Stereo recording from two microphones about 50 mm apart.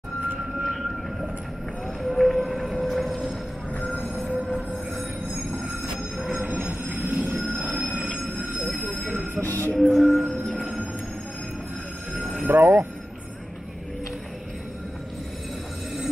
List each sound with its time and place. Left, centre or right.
0.4 s vehicle: centre
2.0 s music: centre
4.6 s train: centre
6.3 s train: right
9.4 s music: left
9.8 s music: centre
10.4 s music: centre
12.1 s a sound: centre
12.5 s speech: right